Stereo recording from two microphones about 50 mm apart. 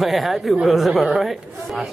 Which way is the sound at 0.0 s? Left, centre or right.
Centre.